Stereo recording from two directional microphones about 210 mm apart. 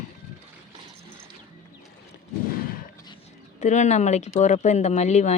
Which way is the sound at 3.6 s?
35° left (ahead or behind).